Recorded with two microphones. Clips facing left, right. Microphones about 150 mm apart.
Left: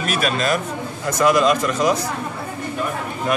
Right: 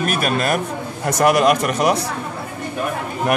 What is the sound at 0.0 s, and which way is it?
A man's voice, 50° right (ahead or behind).